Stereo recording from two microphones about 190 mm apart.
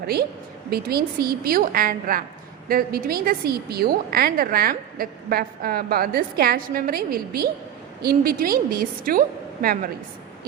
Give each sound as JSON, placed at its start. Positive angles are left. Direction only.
{"t": 0.7, "sound": "a woman's voice", "side_deg": -55}